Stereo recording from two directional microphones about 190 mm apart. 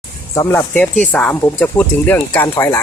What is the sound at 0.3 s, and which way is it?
Speech, 10° left (ahead or behind).